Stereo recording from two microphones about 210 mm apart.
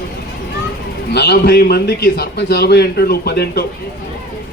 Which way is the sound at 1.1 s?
50° left (ahead or behind).